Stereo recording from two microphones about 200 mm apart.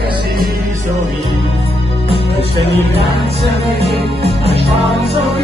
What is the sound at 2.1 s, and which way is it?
Music, 30° right (ahead or behind).